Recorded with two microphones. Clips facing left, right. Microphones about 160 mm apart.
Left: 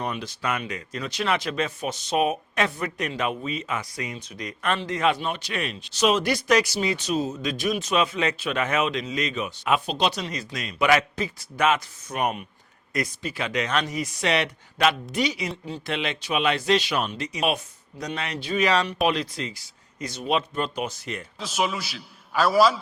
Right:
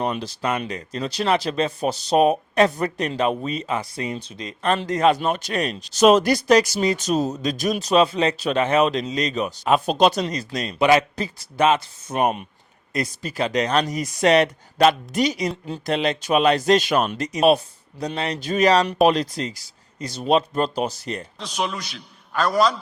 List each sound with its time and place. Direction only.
0.0 s speech: 35° right (ahead or behind)
4.7 s speech: 40° right (ahead or behind)
21.3 s a man's voice: 5° left (ahead or behind)